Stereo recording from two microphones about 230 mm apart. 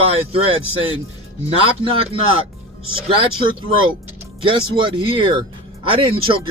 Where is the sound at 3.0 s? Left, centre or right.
Right.